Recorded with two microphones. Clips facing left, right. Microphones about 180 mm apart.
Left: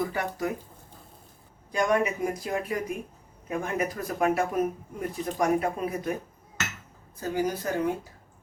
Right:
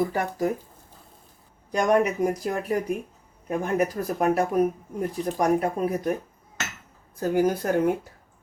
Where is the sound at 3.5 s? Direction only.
40° right (ahead or behind).